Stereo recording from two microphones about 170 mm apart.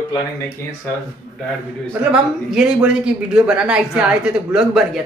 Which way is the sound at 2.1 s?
5° right (ahead or behind).